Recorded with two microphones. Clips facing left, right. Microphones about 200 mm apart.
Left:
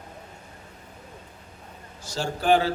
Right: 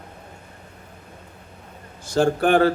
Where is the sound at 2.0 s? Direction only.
55° right (ahead or behind).